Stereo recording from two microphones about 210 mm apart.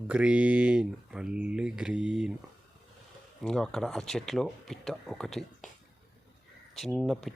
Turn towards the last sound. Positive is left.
turn(degrees=0)  # may be behind; listen again after turning